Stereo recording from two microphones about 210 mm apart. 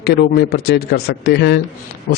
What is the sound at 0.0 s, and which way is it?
Speech, 50° left (ahead or behind).